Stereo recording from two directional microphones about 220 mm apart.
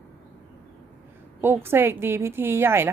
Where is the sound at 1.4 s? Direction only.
10° right (ahead or behind).